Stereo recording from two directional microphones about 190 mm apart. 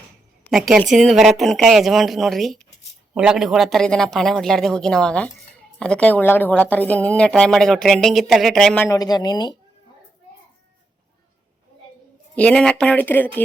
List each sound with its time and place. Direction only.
0.5 s a woman's voice: centre (ahead or behind)
8.9 s speech: 20° left (ahead or behind)
12.4 s speech: 5° left (ahead or behind)